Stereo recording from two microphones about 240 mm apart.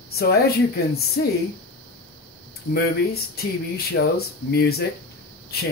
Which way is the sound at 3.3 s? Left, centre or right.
Left.